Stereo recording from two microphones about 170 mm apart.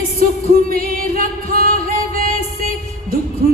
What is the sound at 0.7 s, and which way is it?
A woman's voice, 55° right (ahead or behind).